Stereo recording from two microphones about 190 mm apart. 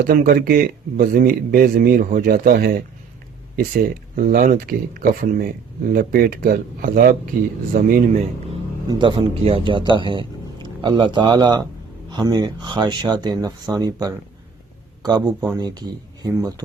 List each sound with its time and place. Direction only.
0.0 s speech: 50° right (ahead or behind)
4.1 s speech: 50° right (ahead or behind)
8.9 s a man's voice: 25° right (ahead or behind)